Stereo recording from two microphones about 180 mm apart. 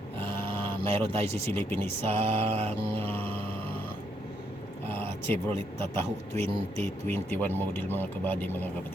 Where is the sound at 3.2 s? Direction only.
30° right (ahead or behind).